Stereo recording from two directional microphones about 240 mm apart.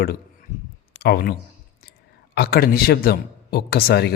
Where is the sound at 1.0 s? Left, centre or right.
Left.